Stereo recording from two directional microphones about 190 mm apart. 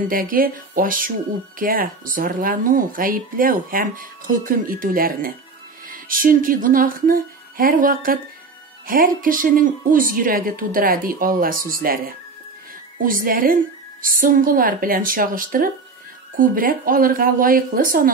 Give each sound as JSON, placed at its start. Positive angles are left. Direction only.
{"t": 0.1, "sound": "speech", "side_deg": -50}